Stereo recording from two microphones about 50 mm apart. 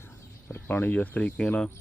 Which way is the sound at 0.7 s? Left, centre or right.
Left.